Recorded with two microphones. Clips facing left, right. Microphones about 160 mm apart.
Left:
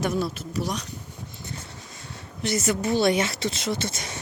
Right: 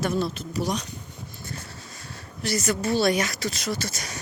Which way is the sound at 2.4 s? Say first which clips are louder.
Left 1 dB; 20° left (ahead or behind).